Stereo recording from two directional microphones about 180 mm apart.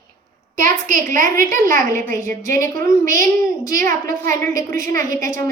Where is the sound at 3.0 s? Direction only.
45° right (ahead or behind).